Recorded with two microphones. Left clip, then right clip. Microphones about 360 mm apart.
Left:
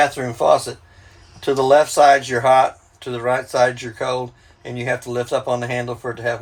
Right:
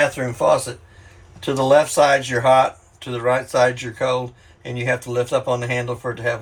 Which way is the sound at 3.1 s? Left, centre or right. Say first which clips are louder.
Right 1 dB; left.